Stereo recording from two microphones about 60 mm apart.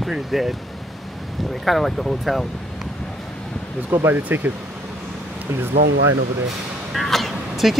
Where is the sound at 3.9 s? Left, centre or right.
Right.